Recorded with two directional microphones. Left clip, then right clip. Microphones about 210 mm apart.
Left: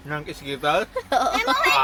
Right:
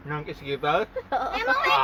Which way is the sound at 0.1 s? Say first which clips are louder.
Left 1 dB; 5° right (ahead or behind).